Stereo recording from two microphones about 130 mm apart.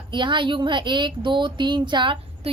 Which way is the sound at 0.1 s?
40° right (ahead or behind).